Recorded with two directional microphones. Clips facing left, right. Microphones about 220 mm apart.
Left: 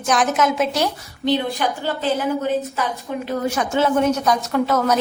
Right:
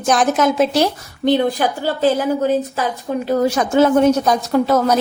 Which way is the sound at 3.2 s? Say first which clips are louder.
Right 6 dB; 35° right (ahead or behind).